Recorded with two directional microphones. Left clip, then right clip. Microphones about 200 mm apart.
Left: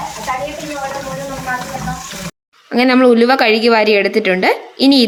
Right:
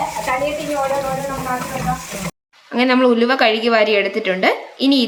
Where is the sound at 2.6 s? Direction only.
30° left (ahead or behind).